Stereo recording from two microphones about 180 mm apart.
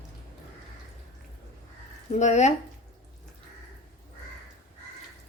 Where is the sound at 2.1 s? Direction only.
40° left (ahead or behind).